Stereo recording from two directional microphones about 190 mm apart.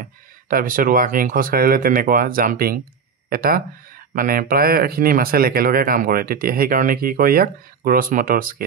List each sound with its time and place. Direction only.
0.0 s speech: 50° right (ahead or behind)